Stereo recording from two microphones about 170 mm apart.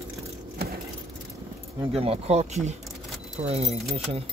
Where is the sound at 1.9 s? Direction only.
35° right (ahead or behind).